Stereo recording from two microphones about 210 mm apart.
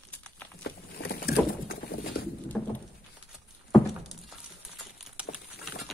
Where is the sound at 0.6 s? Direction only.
45° left (ahead or behind).